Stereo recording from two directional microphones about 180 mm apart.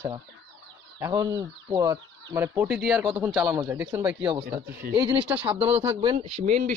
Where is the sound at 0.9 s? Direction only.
15° right (ahead or behind).